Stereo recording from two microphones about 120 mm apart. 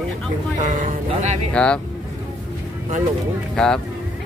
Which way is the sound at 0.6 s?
90° right.